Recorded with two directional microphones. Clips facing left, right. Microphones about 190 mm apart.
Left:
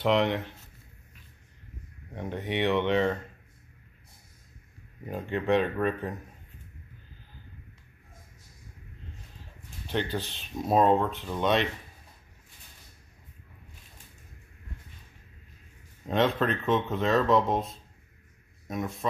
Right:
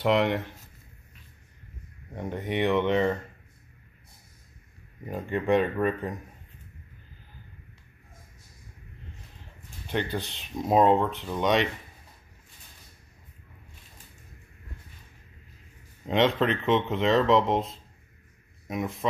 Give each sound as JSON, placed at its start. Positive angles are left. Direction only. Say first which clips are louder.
{"t": 0.0, "sound": "speech", "louder": "right 1 dB", "side_deg": -10}
{"t": 2.1, "sound": "speech", "louder": "right 2 dB", "side_deg": -10}
{"t": 5.0, "sound": "speech", "louder": "right 1 dB", "side_deg": -5}
{"t": 9.8, "sound": "speech", "louder": "right 1 dB", "side_deg": -15}
{"t": 16.1, "sound": "speech", "louder": "right 2 dB", "side_deg": -20}